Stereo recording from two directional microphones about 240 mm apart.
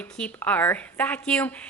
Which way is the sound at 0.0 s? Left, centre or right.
Centre.